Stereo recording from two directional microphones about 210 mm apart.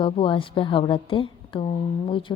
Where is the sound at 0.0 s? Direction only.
25° left (ahead or behind).